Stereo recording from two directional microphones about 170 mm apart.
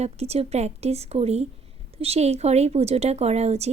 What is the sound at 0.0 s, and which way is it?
Speech, 40° right (ahead or behind).